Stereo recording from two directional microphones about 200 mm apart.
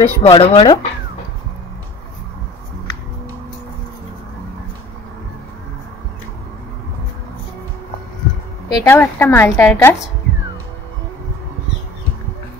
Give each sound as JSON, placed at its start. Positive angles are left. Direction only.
{"t": 0.0, "sound": "speech", "side_deg": 30}
{"t": 8.6, "sound": "a sound", "side_deg": 20}
{"t": 8.9, "sound": "a woman's voice", "side_deg": 10}